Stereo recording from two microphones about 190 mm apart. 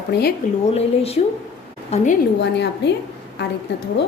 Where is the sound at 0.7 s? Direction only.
30° left (ahead or behind).